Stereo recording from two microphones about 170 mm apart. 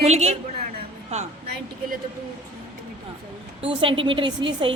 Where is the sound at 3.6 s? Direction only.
30° right (ahead or behind).